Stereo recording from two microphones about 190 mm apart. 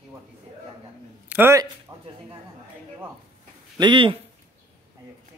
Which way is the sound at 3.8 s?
25° right (ahead or behind).